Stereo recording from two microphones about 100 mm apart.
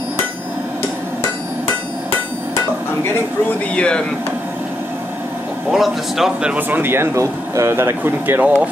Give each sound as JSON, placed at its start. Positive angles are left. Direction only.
{"t": 3.7, "sound": "speech", "side_deg": 10}
{"t": 5.7, "sound": "speech", "side_deg": -5}